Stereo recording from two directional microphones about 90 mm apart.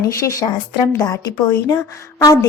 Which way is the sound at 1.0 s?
45° left (ahead or behind).